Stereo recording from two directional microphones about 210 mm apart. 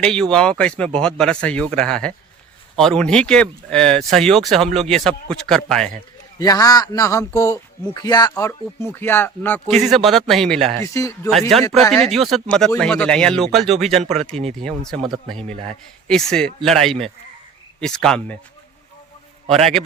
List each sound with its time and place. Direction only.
0.0 s speech: 5° left (ahead or behind)
6.4 s speech: 15° left (ahead or behind); by 10.8 s centre (ahead or behind)
10.8 s speech: 15° left (ahead or behind)
11.3 s speech: centre (ahead or behind)
14.3 s speech: 30° right (ahead or behind)
15.0 s speech: centre (ahead or behind)